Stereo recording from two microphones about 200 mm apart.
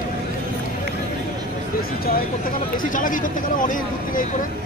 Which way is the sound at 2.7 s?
40° left (ahead or behind).